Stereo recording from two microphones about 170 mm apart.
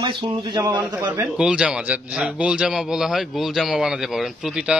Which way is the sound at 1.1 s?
5° right (ahead or behind).